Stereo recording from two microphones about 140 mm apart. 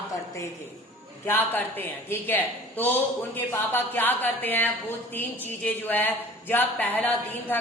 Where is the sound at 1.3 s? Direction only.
15° left (ahead or behind).